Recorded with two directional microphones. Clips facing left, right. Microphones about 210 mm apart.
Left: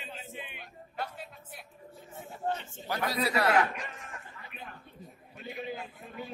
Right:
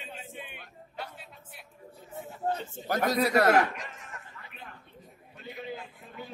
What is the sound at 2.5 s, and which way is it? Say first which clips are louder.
A man's voice: right 5 dB; 40° right (ahead or behind).